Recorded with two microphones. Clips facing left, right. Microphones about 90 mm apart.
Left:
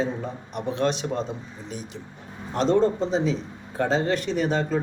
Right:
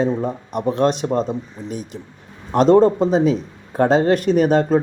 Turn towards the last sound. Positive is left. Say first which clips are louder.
# right 9 dB
turn(degrees=-55)  # may be behind; listen again after turning